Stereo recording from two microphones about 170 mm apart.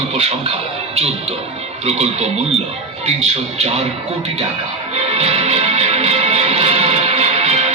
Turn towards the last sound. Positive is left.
turn(degrees=-40)  # may be behind; listen again after turning